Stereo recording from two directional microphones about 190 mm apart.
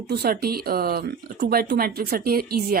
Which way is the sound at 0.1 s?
55° right (ahead or behind).